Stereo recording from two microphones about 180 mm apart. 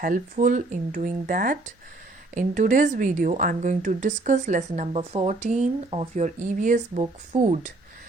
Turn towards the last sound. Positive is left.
turn(degrees=-40)  # may be behind; listen again after turning